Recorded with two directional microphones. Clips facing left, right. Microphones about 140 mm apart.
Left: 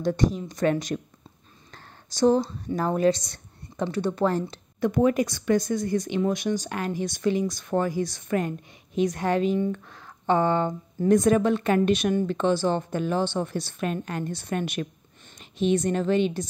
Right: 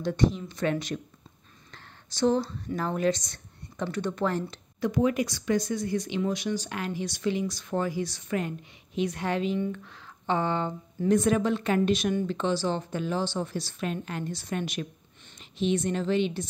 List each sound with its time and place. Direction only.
0.0 s speech: 40° left (ahead or behind)
4.7 s speech: 55° left (ahead or behind)